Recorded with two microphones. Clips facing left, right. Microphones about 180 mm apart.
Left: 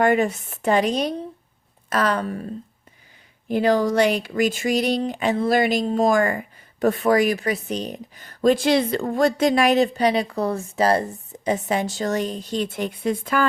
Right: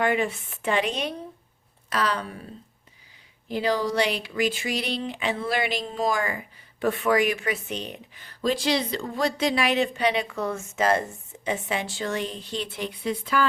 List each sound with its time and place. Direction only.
0.0 s speech: 45° left (ahead or behind)
1.9 s speech: 50° left (ahead or behind)
3.5 s speech: 50° left (ahead or behind)